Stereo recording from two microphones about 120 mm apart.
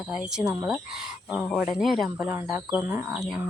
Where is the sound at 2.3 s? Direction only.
20° right (ahead or behind).